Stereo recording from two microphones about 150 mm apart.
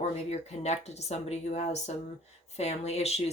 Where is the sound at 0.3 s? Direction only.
45° left (ahead or behind).